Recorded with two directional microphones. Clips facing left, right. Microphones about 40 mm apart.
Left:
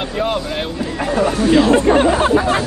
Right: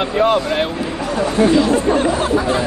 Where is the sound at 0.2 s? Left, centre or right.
Centre.